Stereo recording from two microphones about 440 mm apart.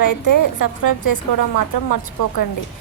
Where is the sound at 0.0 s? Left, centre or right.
Left.